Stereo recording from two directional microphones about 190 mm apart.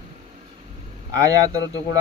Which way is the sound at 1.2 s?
20° right (ahead or behind).